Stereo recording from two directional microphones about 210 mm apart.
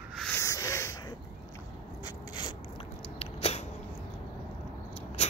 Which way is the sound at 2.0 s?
20° left (ahead or behind).